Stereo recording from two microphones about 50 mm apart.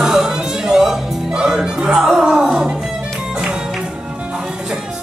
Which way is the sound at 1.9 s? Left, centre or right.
Centre.